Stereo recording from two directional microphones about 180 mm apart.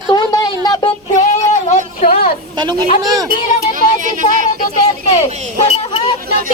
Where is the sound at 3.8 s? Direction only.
45° right (ahead or behind).